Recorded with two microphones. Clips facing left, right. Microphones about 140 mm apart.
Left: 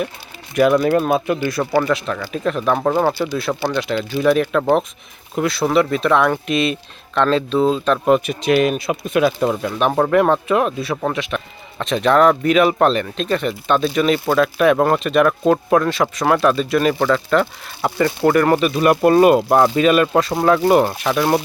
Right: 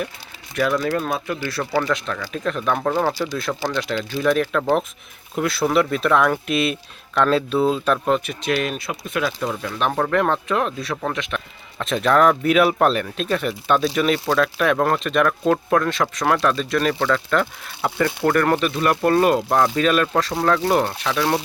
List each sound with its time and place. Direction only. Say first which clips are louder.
0.5 s speech: left 7 dB; 20° left (ahead or behind)
1.9 s speech: left 4 dB; 5° left (ahead or behind)
3.7 s speech: left 3 dB; centre (ahead or behind)
8.0 s speech: left 5 dB; 15° left (ahead or behind)